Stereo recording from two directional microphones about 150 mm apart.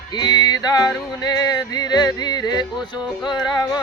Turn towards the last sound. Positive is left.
turn(degrees=25)  # may be behind; listen again after turning